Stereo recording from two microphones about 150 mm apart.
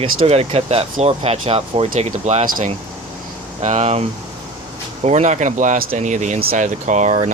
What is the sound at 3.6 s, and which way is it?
Speech, 50° right (ahead or behind).